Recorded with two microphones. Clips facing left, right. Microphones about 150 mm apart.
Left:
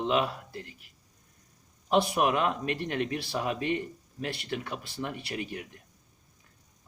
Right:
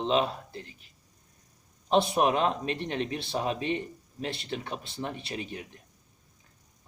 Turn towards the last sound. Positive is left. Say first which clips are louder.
# left 1 dB
turn(degrees=-25)  # may be behind; listen again after turning